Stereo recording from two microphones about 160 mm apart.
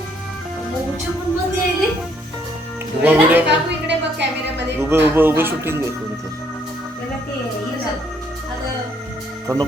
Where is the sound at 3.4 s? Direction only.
90° right.